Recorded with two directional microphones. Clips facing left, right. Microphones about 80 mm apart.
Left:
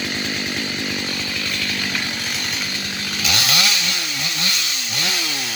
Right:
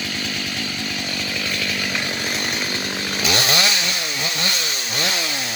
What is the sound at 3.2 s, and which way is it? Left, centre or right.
Chainsaw, right.